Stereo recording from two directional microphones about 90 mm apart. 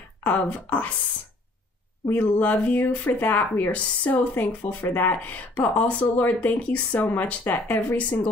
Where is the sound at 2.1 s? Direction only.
20° left (ahead or behind).